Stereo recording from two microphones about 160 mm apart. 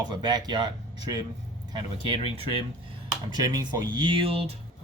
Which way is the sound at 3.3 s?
25° right (ahead or behind).